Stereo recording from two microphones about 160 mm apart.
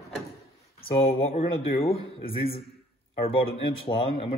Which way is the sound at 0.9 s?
40° left (ahead or behind).